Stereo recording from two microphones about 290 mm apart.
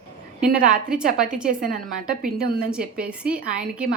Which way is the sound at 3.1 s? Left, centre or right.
Centre.